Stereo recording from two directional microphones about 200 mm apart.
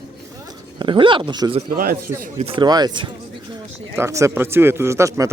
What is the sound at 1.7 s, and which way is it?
Speech, 50° right (ahead or behind).